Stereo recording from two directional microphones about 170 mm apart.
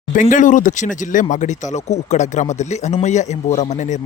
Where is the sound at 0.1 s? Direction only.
50° left (ahead or behind).